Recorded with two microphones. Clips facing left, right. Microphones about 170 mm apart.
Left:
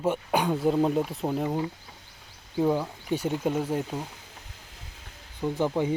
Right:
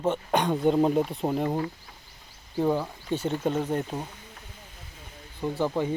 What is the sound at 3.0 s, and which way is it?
Speech, 10° left (ahead or behind).